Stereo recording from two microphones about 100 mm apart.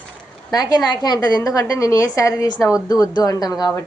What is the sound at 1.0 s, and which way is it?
A woman's voice, 40° left (ahead or behind).